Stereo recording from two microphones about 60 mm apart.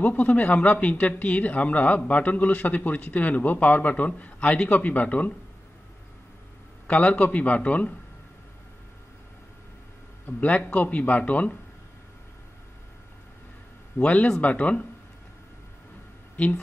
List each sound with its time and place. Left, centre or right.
0.0 s speech: left
6.9 s speech: left
10.4 s speech: left
13.9 s speech: left